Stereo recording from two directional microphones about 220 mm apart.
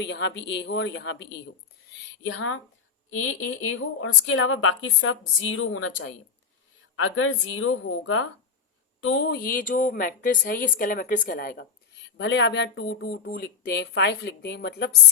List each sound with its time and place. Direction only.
0.0 s speech: 50° left (ahead or behind)
2.2 s speech: 65° left (ahead or behind)
6.9 s a woman's voice: 65° left (ahead or behind); by 11.6 s 40° left (ahead or behind)
12.1 s speech: 55° left (ahead or behind)